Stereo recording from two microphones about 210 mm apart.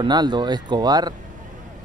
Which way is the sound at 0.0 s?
20° right (ahead or behind).